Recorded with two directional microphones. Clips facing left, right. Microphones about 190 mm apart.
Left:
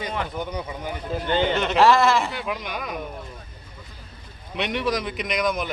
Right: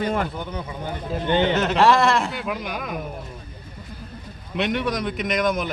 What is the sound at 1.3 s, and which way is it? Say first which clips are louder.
Speech: right 2 dB; 15° right (ahead or behind).